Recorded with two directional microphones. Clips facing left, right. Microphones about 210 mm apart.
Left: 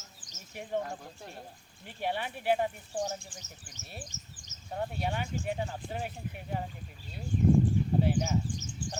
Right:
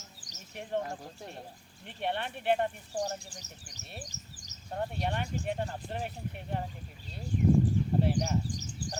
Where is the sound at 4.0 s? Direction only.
35° right (ahead or behind).